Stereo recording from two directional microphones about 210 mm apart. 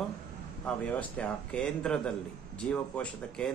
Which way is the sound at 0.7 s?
5° left (ahead or behind).